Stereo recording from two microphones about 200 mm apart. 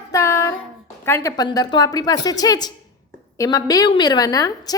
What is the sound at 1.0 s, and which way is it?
A woman's voice, 15° left (ahead or behind).